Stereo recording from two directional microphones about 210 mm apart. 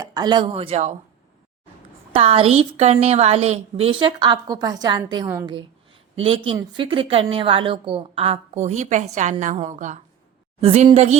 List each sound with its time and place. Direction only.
0.0 s speech: 20° right (ahead or behind)
2.1 s a woman's voice: 25° right (ahead or behind)
6.1 s a woman's voice: 25° right (ahead or behind)